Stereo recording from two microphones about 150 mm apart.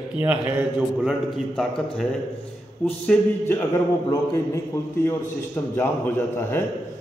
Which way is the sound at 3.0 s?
10° left (ahead or behind).